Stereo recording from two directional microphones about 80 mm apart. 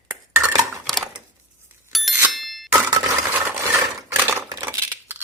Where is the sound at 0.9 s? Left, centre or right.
Centre.